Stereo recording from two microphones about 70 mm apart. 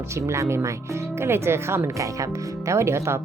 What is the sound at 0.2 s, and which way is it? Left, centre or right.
Speech, right.